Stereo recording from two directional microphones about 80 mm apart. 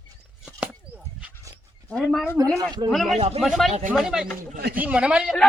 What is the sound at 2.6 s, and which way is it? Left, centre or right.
Speech, right.